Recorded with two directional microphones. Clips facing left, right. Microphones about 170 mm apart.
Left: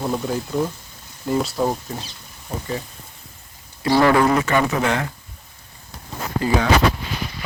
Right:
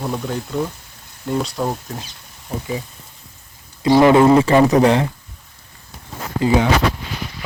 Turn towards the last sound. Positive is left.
turn(degrees=-20)  # may be behind; listen again after turning